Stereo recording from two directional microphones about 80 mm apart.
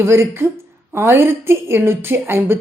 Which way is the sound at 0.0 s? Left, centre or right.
Right.